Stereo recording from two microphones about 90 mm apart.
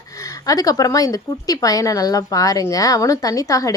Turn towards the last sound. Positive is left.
turn(degrees=40)  # may be behind; listen again after turning